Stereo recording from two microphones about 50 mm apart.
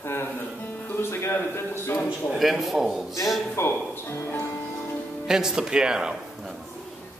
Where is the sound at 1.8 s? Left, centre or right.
Left.